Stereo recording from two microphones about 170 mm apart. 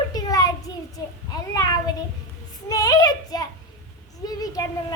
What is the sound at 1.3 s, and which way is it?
Speech, 20° left (ahead or behind).